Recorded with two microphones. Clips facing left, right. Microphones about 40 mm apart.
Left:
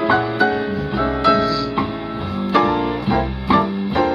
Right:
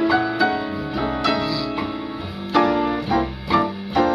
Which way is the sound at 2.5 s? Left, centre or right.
Left.